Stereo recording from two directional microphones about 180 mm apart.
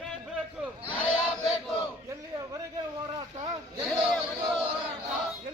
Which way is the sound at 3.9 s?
Centre (ahead or behind).